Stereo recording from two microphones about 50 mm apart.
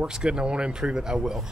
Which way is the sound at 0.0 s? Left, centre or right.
Centre.